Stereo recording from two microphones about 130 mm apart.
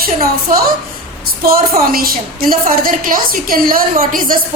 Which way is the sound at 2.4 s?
90° right.